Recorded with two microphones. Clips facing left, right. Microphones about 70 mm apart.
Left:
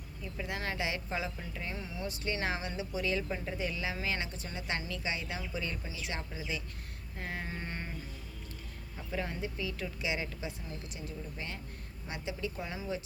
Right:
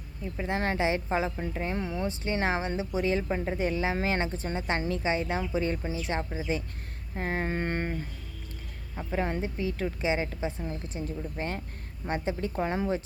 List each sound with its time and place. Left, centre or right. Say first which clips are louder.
0.2 s speech: right 8 dB; right
2.0 s speech: right 4 dB; right
7.2 s mantra: right 10 dB; right
9.0 s speech: right 7 dB; right